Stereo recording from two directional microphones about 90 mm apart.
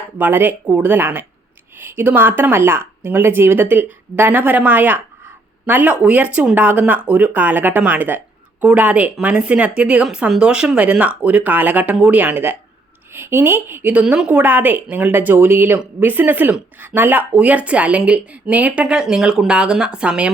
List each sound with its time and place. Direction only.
0.2 s speech: 20° right (ahead or behind)